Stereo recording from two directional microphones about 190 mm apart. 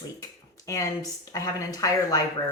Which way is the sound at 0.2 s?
15° left (ahead or behind).